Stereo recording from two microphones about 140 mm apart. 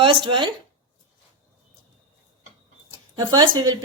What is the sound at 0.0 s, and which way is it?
Speech, 35° right (ahead or behind).